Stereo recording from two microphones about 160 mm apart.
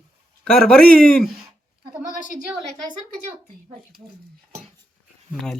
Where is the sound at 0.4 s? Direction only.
5° left (ahead or behind).